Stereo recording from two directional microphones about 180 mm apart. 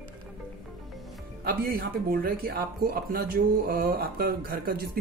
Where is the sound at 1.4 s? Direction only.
55° right (ahead or behind).